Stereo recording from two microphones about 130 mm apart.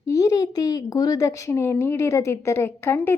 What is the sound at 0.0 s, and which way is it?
A woman's voice, 25° left (ahead or behind).